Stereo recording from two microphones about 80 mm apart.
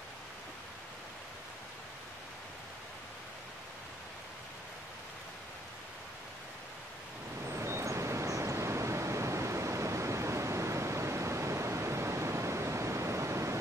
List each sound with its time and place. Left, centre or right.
7.4 s vehicle: right